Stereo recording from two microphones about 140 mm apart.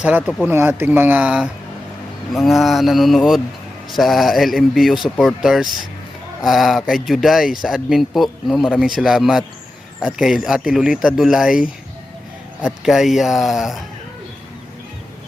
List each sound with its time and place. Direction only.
0.2 s speech: 5° left (ahead or behind)
0.4 s speech: 15° right (ahead or behind)
12.6 s speech: centre (ahead or behind)